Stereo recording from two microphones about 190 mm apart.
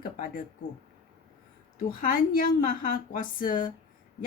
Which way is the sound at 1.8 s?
45° left (ahead or behind).